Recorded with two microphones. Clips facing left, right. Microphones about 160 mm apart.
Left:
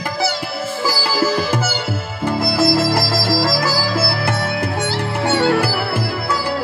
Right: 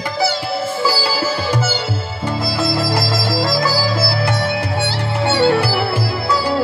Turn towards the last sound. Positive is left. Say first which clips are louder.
# right 1 dB
turn(degrees=50)  # may be behind; listen again after turning